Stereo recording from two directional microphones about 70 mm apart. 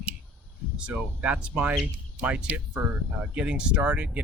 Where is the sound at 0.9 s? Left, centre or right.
Centre.